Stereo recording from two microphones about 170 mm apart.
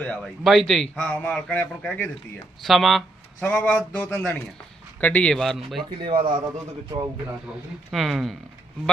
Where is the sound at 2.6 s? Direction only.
Centre (ahead or behind).